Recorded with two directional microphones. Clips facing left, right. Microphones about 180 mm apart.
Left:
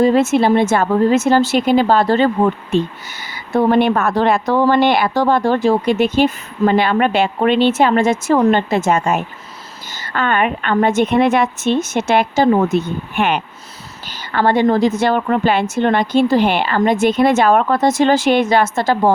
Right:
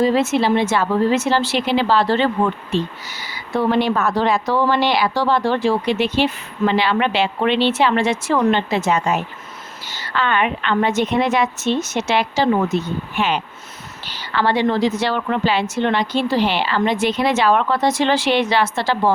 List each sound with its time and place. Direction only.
0.0 s a woman's voice: 50° left (ahead or behind)